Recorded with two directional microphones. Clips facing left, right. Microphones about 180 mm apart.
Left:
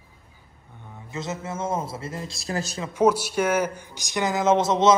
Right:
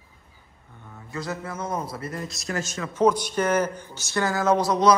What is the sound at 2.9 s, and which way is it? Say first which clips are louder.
Speech: left 1 dB; 10° left (ahead or behind).